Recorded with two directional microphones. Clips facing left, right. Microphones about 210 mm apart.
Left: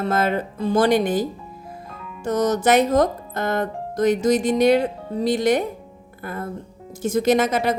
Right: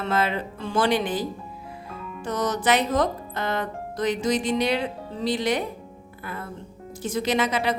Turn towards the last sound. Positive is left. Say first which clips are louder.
# left 5 dB
turn(degrees=45)  # may be behind; listen again after turning